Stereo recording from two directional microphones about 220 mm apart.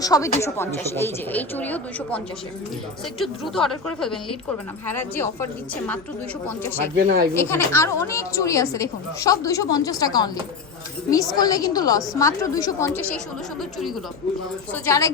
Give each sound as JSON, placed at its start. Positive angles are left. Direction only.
{"t": 0.0, "sound": "a woman's voice", "side_deg": 15}
{"t": 4.9, "sound": "a woman's voice", "side_deg": 10}
{"t": 6.9, "sound": "speech", "side_deg": -45}
{"t": 7.3, "sound": "a woman's voice", "side_deg": 10}
{"t": 11.3, "sound": "a woman's voice", "side_deg": 15}
{"t": 13.6, "sound": "a woman's voice", "side_deg": 0}
{"t": 14.7, "sound": "a woman's voice", "side_deg": 15}